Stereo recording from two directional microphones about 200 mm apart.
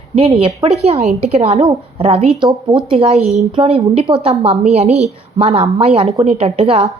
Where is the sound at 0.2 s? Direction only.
30° right (ahead or behind).